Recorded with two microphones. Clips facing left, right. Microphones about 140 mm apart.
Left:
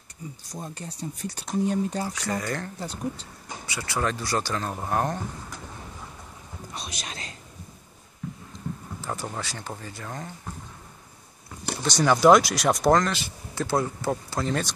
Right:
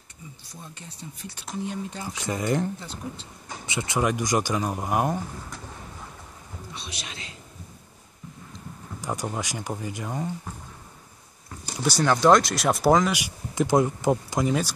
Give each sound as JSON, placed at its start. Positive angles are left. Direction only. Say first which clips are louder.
{"t": 0.5, "sound": "speech", "louder": "left 8 dB", "side_deg": 40}
{"t": 2.1, "sound": "speech", "louder": "right 4 dB", "side_deg": -20}
{"t": 2.8, "sound": "speech", "louder": "left 5 dB", "side_deg": 40}
{"t": 3.6, "sound": "speech", "louder": "right 3 dB", "side_deg": -20}
{"t": 6.7, "sound": "thunder", "louder": "left 3 dB", "side_deg": 45}
{"t": 9.0, "sound": "speech", "louder": "right 3 dB", "side_deg": -15}
{"t": 11.8, "sound": "speech", "louder": "right 1 dB", "side_deg": -5}
{"t": 12.1, "sound": "speech", "louder": "left 2 dB", "side_deg": 5}